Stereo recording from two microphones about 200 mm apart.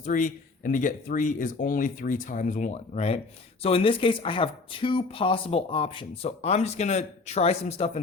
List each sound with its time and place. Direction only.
0.0 s speech: 40° left (ahead or behind)